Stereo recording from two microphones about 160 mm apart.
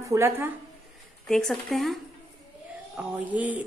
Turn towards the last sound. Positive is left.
turn(degrees=-10)  # may be behind; listen again after turning